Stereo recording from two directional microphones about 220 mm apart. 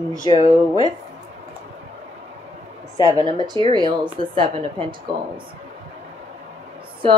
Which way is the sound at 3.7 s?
20° right (ahead or behind).